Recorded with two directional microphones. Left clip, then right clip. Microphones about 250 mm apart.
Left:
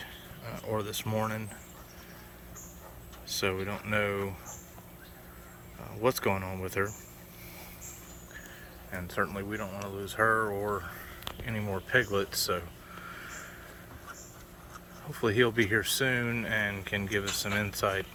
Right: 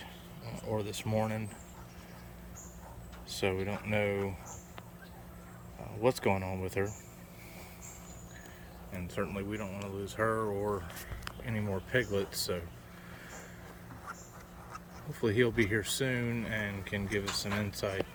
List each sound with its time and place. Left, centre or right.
0.0 s a sound: centre
3.2 s speech: centre
6.0 s speech: centre
8.9 s speech: centre
13.1 s a sound: centre
15.1 s speech: centre